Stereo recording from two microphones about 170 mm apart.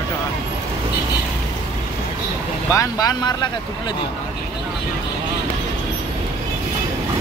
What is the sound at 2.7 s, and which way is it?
Speech, 20° left (ahead or behind).